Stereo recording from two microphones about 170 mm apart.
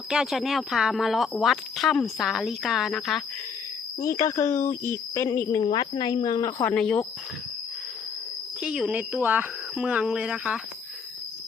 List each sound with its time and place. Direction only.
0.1 s speech: 5° right (ahead or behind)
4.0 s speech: 20° left (ahead or behind)
5.6 s speech: 25° left (ahead or behind); by 7.0 s 5° left (ahead or behind)
8.6 s speech: 5° right (ahead or behind)